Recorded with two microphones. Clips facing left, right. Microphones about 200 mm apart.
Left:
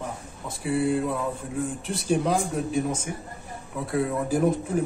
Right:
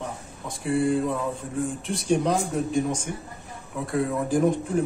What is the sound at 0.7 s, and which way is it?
A man's voice, 5° left (ahead or behind).